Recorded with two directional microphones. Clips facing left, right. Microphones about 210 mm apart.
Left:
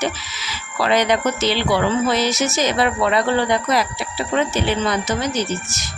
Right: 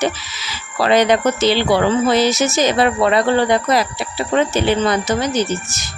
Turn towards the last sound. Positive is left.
turn(degrees=-30)  # may be behind; listen again after turning